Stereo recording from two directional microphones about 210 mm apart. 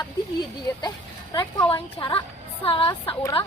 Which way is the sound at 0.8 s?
20° left (ahead or behind).